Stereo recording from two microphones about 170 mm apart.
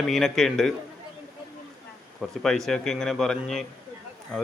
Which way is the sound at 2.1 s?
Centre (ahead or behind).